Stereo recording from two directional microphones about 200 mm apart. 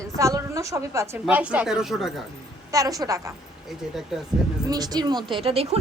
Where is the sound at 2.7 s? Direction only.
15° right (ahead or behind).